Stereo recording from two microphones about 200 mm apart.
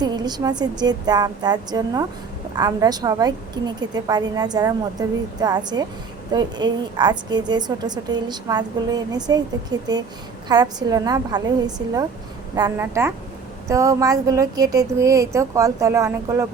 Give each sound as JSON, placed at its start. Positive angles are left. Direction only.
{"t": 0.0, "sound": "a woman's voice", "side_deg": -20}